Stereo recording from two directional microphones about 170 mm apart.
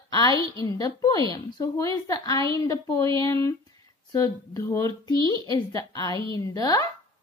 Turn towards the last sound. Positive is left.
turn(degrees=20)  # may be behind; listen again after turning